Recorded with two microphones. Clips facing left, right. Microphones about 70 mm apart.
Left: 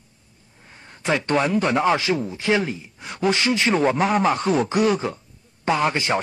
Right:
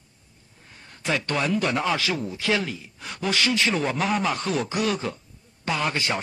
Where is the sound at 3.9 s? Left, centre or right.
Left.